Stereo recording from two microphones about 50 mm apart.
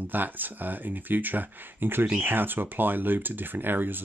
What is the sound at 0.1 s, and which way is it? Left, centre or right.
Speech, right.